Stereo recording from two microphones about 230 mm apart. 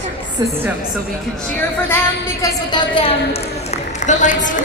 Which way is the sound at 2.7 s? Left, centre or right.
Left.